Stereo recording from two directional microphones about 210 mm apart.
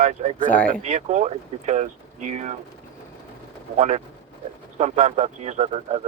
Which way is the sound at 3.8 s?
30° right (ahead or behind).